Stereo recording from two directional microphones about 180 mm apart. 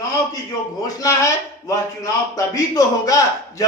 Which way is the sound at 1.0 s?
15° left (ahead or behind).